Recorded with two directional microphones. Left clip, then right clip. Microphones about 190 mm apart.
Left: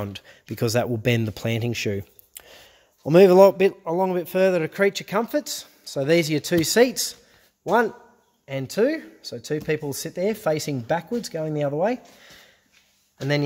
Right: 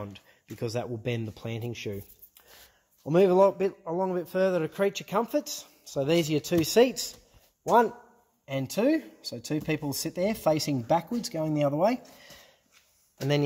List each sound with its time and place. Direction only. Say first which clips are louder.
0.0 s a man's voice: left 8 dB; 60° left (ahead or behind); by 12.3 s 10° left (ahead or behind)